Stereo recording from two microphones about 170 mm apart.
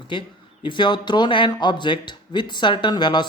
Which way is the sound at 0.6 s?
25° left (ahead or behind).